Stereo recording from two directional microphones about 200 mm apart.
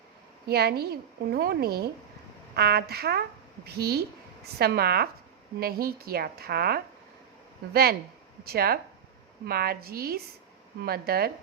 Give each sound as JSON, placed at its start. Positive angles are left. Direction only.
{"t": 0.4, "sound": "a woman's voice", "side_deg": -50}